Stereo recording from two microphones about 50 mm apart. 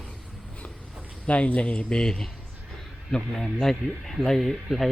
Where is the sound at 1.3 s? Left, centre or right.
Left.